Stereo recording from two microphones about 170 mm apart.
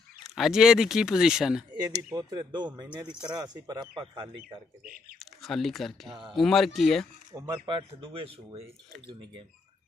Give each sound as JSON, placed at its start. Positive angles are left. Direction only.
{"t": 0.4, "sound": "speech", "side_deg": -5}
{"t": 2.1, "sound": "speech", "side_deg": -25}
{"t": 5.2, "sound": "speech", "side_deg": 0}
{"t": 7.3, "sound": "speech", "side_deg": -25}